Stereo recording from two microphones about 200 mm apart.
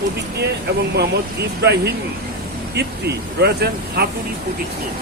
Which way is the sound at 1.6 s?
55° right (ahead or behind).